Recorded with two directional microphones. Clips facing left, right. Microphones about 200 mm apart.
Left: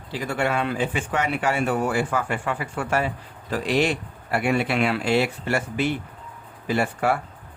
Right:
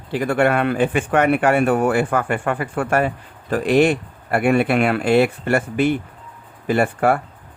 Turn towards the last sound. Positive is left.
turn(degrees=-55)  # may be behind; listen again after turning